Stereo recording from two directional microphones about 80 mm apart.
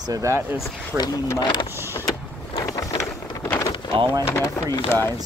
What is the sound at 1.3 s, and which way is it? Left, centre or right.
Speech, left.